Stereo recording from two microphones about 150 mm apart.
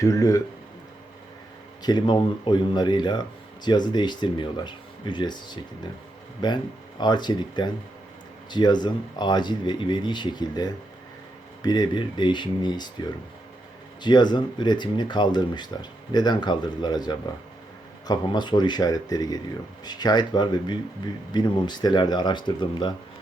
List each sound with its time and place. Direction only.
0.0 s speech: 20° left (ahead or behind)
1.8 s speech: 30° left (ahead or behind)